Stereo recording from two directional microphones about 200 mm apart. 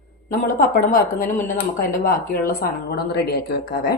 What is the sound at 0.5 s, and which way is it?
Speech, 45° left (ahead or behind).